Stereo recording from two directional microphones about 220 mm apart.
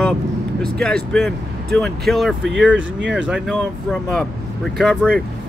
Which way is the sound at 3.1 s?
5° right (ahead or behind).